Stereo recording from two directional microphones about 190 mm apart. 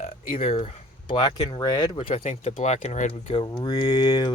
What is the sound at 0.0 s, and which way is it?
Speech, 35° left (ahead or behind).